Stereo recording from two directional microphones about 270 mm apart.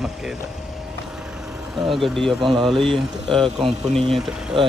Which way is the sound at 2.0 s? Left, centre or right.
Centre.